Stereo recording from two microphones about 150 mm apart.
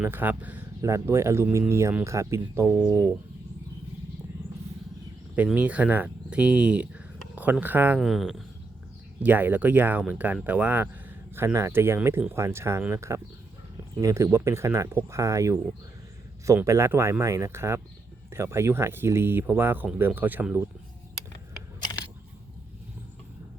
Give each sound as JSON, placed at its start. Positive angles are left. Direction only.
{"t": 0.0, "sound": "speech", "side_deg": -15}
{"t": 5.4, "sound": "speech", "side_deg": -10}
{"t": 7.9, "sound": "speech", "side_deg": 0}
{"t": 9.2, "sound": "speech", "side_deg": -10}